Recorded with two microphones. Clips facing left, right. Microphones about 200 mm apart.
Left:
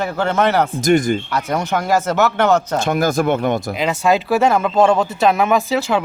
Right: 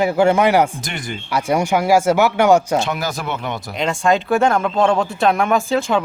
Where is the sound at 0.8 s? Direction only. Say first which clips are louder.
Left 14 dB; 45° left (ahead or behind).